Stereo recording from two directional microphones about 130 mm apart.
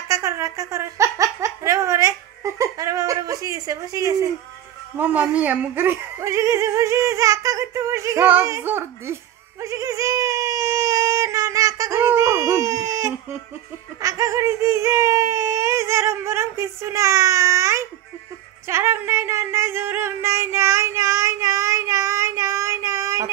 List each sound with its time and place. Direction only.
0.1 s speech: 25° right (ahead or behind)
4.9 s speech: 15° right (ahead or behind)
8.3 s a sound: 20° right (ahead or behind)
14.0 s speech: 25° right (ahead or behind)
18.7 s music: 20° right (ahead or behind)